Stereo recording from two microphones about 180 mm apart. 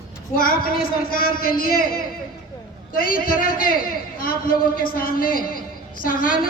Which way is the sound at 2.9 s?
55° left (ahead or behind).